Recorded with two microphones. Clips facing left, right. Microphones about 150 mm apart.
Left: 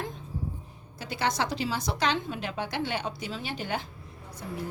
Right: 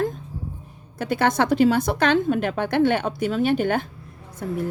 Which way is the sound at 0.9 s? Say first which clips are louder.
Right 9 dB; 55° right (ahead or behind).